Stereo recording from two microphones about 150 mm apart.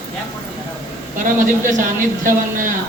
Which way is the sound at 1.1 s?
60° right (ahead or behind).